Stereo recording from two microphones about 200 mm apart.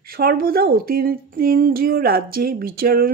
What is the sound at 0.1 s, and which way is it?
Speech, 50° right (ahead or behind).